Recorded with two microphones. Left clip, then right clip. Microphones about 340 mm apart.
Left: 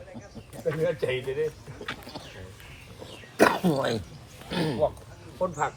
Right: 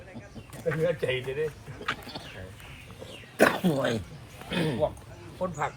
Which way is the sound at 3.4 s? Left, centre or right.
Left.